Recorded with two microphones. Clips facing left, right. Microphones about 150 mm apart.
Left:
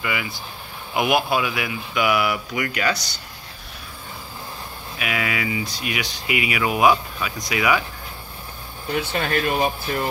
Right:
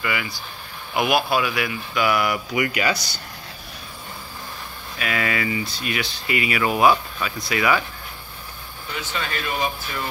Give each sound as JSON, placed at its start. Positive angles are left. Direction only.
{"t": 0.0, "sound": "speech", "side_deg": 20}
{"t": 2.1, "sound": "speech", "side_deg": 5}
{"t": 2.5, "sound": "speech", "side_deg": -5}
{"t": 4.9, "sound": "speech", "side_deg": 10}
{"t": 8.9, "sound": "speech", "side_deg": 55}